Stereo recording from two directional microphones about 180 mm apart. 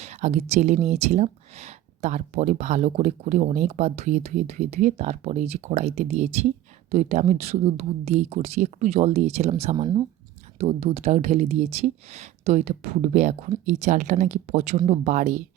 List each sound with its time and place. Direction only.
0.0 s speech: 40° right (ahead or behind)
9.7 s speech: 25° right (ahead or behind)
10.6 s speech: 35° right (ahead or behind)